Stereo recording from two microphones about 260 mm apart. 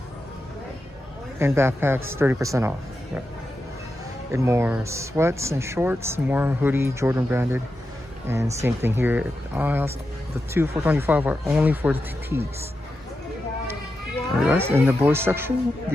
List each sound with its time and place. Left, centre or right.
1.4 s speech: centre
4.3 s speech: centre
14.4 s speech: centre